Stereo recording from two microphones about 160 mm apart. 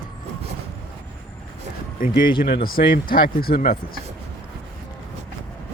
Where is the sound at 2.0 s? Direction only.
65° left (ahead or behind).